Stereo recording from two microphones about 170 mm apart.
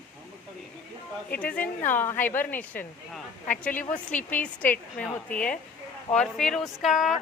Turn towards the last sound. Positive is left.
turn(degrees=0)  # may be behind; listen again after turning